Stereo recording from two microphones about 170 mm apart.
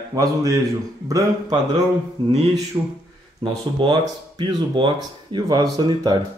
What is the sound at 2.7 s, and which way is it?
Speech, 30° right (ahead or behind).